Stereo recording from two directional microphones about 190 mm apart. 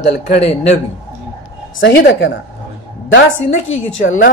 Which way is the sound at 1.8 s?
65° left (ahead or behind).